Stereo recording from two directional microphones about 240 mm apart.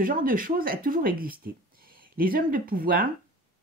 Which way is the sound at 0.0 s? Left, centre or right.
Right.